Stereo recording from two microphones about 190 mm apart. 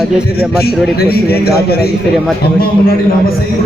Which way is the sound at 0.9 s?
55° left (ahead or behind).